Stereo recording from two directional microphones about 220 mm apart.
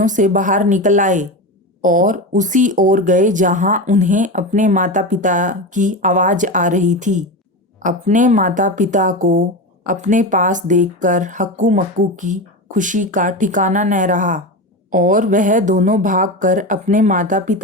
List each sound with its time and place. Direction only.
0.0 s speech: 35° right (ahead or behind)